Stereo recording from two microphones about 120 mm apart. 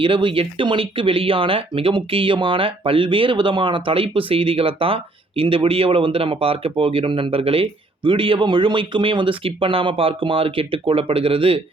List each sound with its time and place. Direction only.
0.0 s speech: 45° right (ahead or behind)